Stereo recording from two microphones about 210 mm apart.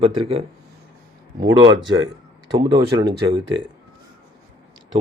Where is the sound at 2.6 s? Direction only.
20° right (ahead or behind).